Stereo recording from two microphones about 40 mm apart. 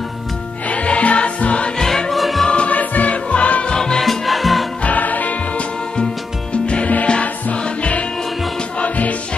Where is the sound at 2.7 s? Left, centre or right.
Left.